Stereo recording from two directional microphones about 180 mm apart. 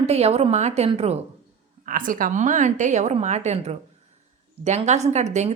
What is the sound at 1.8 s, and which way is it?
A woman's voice, 50° right (ahead or behind).